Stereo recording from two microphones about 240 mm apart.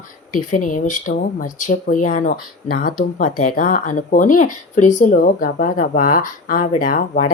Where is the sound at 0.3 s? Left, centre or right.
Left.